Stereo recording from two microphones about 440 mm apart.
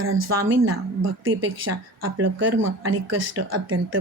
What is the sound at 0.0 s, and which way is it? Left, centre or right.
A woman's voice, right.